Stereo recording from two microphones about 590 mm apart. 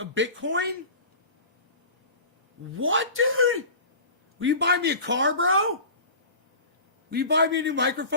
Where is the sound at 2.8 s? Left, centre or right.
Centre.